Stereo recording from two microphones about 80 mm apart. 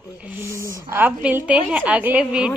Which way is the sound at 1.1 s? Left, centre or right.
Centre.